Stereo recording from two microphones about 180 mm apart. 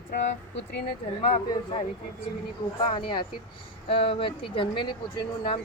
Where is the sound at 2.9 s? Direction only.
25° left (ahead or behind).